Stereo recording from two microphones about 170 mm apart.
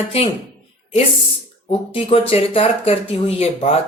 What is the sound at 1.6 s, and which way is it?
Speech, 35° left (ahead or behind).